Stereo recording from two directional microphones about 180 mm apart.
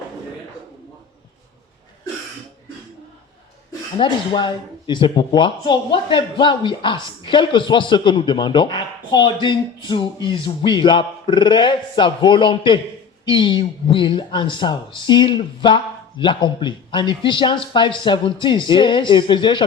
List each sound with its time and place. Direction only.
3.9 s speech: 25° left (ahead or behind)